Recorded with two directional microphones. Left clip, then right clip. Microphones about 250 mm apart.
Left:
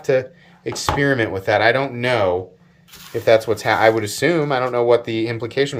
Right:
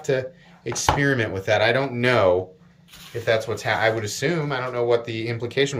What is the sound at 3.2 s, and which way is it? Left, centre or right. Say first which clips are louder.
Speech: left 7 dB; left.